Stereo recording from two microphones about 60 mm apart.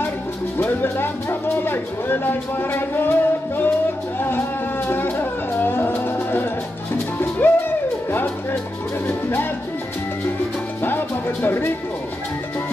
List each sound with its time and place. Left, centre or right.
0.6 s speech: left
4.2 s music: left
9.0 s music: left
11.4 s speech: left